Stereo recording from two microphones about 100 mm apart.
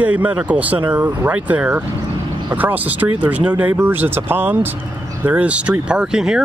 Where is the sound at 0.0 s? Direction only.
15° right (ahead or behind).